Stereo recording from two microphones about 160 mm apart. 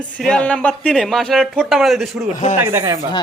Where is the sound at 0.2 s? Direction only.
5° left (ahead or behind).